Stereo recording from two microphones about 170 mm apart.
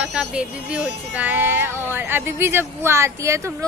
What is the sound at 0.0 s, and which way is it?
A woman's voice, 5° right (ahead or behind).